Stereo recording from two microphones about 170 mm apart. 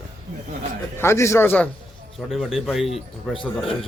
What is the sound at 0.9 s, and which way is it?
Speech, 15° left (ahead or behind).